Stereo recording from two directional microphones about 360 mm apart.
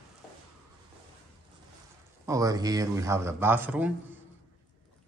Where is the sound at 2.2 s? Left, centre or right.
Centre.